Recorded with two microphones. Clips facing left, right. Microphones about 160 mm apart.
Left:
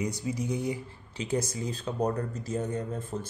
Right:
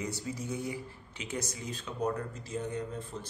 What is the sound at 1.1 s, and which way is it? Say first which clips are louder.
Speech: left 8 dB; 35° left (ahead or behind).